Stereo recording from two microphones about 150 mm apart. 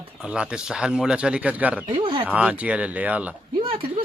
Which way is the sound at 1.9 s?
35° right (ahead or behind).